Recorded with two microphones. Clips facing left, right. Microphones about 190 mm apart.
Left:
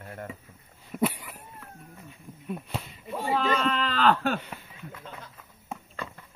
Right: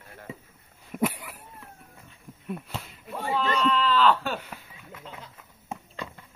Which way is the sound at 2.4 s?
Centre (ahead or behind).